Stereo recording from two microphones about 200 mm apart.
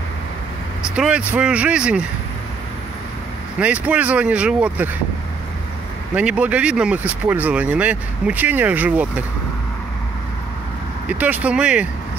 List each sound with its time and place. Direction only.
0.9 s speech: 5° right (ahead or behind)
3.5 s speech: 5° right (ahead or behind)
6.1 s speech: 5° right (ahead or behind)
11.1 s speech: 10° right (ahead or behind)